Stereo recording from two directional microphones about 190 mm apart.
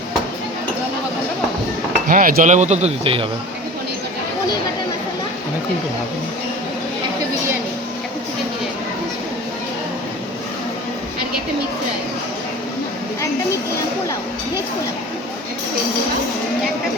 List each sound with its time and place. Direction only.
2.0 s speech: 45° right (ahead or behind); by 3.2 s 30° right (ahead or behind)